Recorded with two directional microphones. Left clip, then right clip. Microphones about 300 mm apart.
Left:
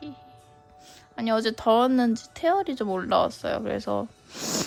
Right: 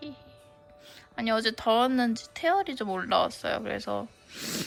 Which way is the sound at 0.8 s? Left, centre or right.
Centre.